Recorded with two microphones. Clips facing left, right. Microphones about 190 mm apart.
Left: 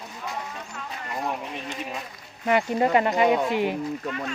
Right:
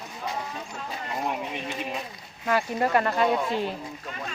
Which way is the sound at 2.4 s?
20° left (ahead or behind).